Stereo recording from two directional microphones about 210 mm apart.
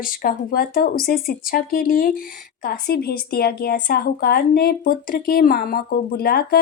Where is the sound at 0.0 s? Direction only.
45° left (ahead or behind).